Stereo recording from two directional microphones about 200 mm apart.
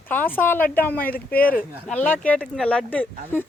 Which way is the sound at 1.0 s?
45° left (ahead or behind).